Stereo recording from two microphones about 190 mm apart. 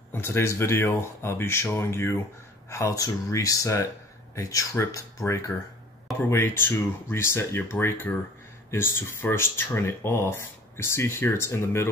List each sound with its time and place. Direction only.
0.1 s speech: 10° left (ahead or behind)